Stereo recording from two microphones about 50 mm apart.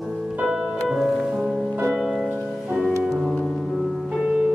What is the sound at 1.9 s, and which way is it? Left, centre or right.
Music, centre.